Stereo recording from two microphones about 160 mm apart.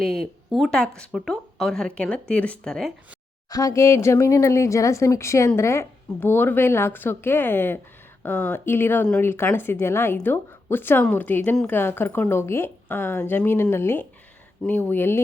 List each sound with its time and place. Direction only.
0.0 s speech: centre (ahead or behind)
3.5 s a woman's voice: 20° left (ahead or behind)